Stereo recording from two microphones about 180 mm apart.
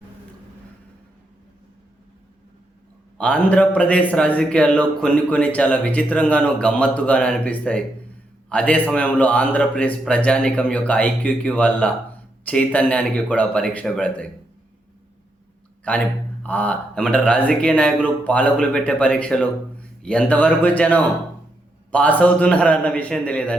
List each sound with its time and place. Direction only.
3.2 s a man's voice: 5° left (ahead or behind)
15.9 s a man's voice: 10° left (ahead or behind)